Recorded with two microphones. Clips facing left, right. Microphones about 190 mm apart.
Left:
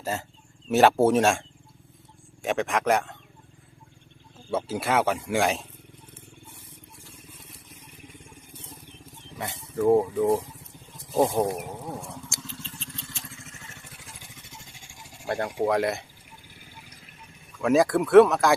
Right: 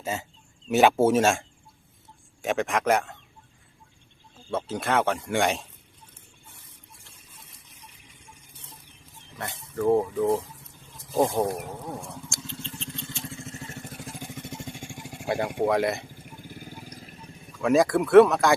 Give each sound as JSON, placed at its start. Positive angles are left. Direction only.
{"t": 0.0, "sound": "speech", "side_deg": 0}
{"t": 4.5, "sound": "speech", "side_deg": 5}
{"t": 9.8, "sound": "speech", "side_deg": 10}
{"t": 12.1, "sound": "vehicle", "side_deg": 5}
{"t": 12.9, "sound": "vehicle", "side_deg": -25}
{"t": 15.3, "sound": "speech", "side_deg": -5}
{"t": 16.2, "sound": "vehicle", "side_deg": -45}
{"t": 17.5, "sound": "speech", "side_deg": 0}